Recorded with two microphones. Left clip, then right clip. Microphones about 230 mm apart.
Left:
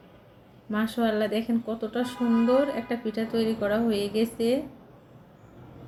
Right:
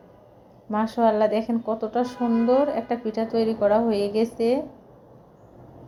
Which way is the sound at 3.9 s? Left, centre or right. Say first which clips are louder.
Right 4 dB; right.